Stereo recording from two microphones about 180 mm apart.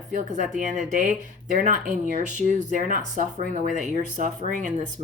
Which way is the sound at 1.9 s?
45° right (ahead or behind).